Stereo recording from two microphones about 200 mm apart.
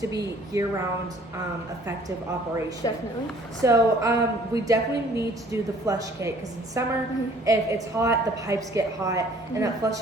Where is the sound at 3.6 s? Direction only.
15° right (ahead or behind).